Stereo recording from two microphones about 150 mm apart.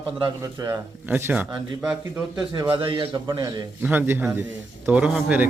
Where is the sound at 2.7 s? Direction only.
30° right (ahead or behind).